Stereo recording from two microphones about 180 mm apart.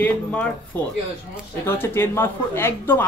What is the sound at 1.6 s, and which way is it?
A woman's voice, 10° left (ahead or behind).